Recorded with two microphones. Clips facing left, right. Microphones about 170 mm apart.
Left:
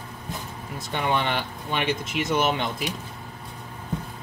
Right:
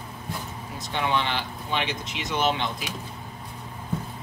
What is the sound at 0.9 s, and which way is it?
Speech, 50° left (ahead or behind).